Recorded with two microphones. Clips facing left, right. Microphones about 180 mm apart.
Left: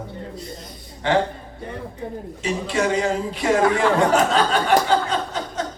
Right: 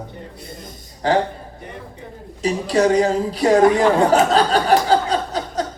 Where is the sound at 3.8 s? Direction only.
35° right (ahead or behind).